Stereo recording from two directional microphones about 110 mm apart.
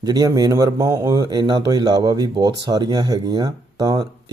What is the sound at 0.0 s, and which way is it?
Speech, 35° right (ahead or behind).